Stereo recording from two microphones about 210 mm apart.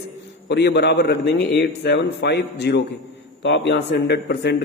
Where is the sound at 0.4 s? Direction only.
55° left (ahead or behind).